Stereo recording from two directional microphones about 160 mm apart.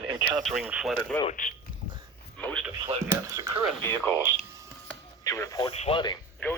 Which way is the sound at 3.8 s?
10° left (ahead or behind).